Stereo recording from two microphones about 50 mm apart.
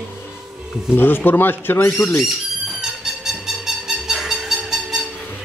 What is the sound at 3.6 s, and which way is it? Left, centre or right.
Music, centre.